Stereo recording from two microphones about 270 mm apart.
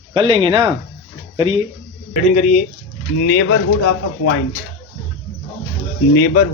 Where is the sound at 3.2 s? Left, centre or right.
Left.